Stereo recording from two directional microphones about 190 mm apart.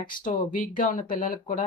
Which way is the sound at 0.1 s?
45° left (ahead or behind).